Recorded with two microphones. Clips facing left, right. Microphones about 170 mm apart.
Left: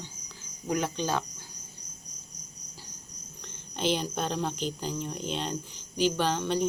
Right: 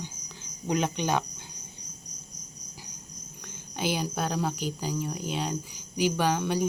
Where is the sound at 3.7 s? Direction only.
10° right (ahead or behind).